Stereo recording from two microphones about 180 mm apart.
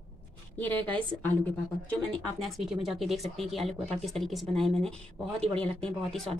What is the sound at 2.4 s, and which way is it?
A woman's voice, centre (ahead or behind).